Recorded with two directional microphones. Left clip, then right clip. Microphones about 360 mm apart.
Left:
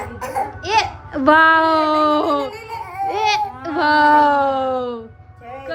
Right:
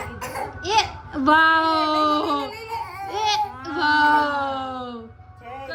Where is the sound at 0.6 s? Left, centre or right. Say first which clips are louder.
Left 1 dB; centre.